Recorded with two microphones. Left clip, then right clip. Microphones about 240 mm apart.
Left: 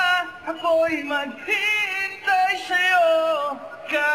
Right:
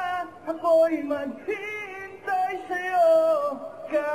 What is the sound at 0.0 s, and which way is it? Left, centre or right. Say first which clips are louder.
Music: left 8 dB; left.